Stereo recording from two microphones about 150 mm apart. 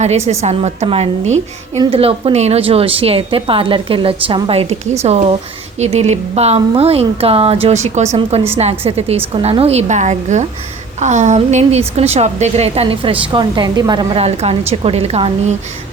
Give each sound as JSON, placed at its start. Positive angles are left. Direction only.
{"t": 0.3, "sound": "a woman's voice", "side_deg": -45}
{"t": 14.2, "sound": "a woman's voice", "side_deg": -45}